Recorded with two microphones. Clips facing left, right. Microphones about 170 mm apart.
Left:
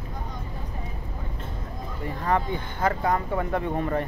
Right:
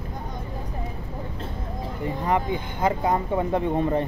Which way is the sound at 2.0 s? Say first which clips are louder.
Right 1 dB; 15° right (ahead or behind).